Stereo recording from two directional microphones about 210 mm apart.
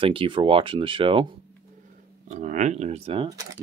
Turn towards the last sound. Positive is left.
turn(degrees=-20)  # may be behind; listen again after turning